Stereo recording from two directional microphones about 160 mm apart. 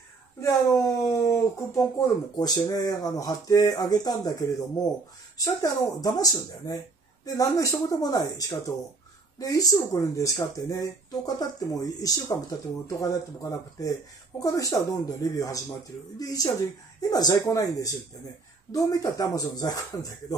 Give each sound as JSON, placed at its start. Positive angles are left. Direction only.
{"t": 0.4, "sound": "speech", "side_deg": 20}